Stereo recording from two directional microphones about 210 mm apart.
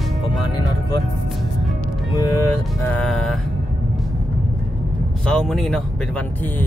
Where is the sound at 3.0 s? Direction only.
5° left (ahead or behind).